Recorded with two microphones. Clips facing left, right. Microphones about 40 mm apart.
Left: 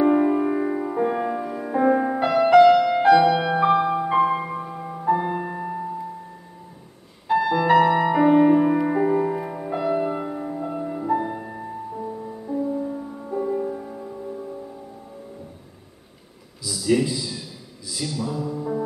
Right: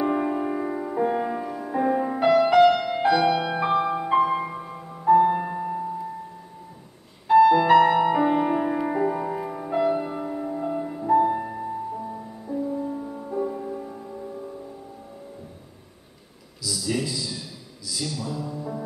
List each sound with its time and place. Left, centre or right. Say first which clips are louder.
0.0 s music: left 6 dB; centre
7.2 s music: right 4 dB; centre
9.9 s music: left 3 dB; centre
13.5 s music: left 5 dB; centre
16.8 s a sound: left 7 dB; left
17.8 s music: left 2 dB; centre